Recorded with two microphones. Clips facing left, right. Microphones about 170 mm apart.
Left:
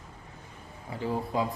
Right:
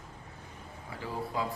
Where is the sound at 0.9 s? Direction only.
20° left (ahead or behind).